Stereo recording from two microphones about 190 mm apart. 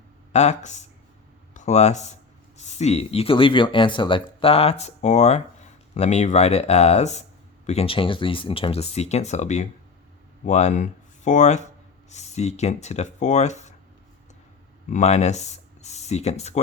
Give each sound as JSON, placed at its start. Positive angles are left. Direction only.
{"t": 0.3, "sound": "speech", "side_deg": 40}
{"t": 14.8, "sound": "speech", "side_deg": 40}